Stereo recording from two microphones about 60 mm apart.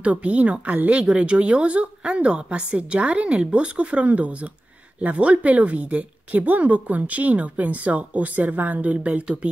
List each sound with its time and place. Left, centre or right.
0.0 s speech: right